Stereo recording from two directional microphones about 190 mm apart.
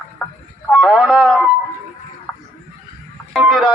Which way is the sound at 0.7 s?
Centre (ahead or behind).